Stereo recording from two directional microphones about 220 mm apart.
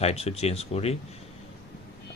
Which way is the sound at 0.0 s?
30° left (ahead or behind).